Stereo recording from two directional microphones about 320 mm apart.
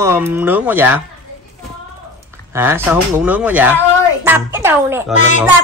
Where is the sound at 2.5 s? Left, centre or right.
Centre.